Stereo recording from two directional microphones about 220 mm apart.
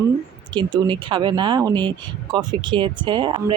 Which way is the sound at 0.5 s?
20° right (ahead or behind).